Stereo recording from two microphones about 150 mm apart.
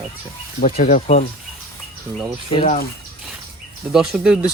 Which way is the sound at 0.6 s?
55° left (ahead or behind).